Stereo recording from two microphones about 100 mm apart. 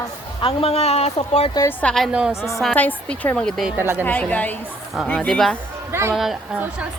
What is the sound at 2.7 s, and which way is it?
Speech, 15° left (ahead or behind).